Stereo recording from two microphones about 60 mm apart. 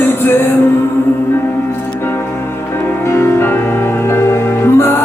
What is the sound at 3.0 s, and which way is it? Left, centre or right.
Music, left.